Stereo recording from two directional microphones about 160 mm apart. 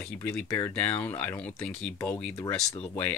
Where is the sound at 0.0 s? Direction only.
10° left (ahead or behind).